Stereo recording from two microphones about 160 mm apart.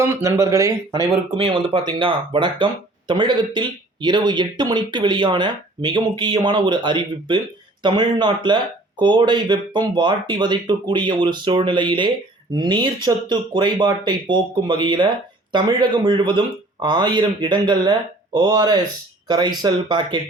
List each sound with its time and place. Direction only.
0.0 s speech: 20° right (ahead or behind)
1.4 s speech: 35° right (ahead or behind)